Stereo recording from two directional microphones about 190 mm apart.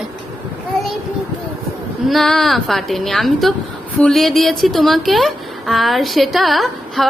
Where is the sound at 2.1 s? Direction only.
Centre (ahead or behind).